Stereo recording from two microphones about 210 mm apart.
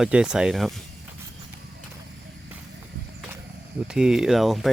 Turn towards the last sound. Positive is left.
turn(degrees=0)  # may be behind; listen again after turning